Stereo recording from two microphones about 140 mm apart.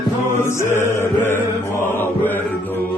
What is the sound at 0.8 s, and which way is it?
Mantra, 15° left (ahead or behind).